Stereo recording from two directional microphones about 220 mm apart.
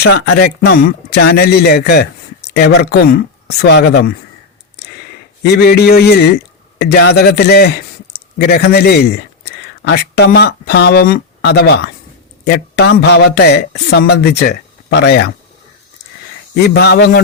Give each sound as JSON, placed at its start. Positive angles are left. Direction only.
{"t": 0.0, "sound": "speech", "side_deg": 50}
{"t": 5.4, "sound": "a man's voice", "side_deg": 45}
{"t": 16.6, "sound": "speech", "side_deg": 50}